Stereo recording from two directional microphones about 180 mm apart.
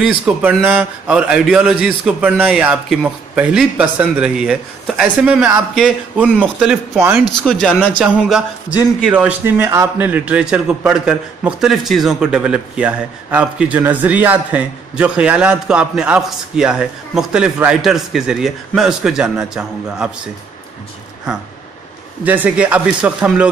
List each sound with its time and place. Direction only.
0.0 s a man's voice: 5° right (ahead or behind)
22.2 s speech: 10° right (ahead or behind)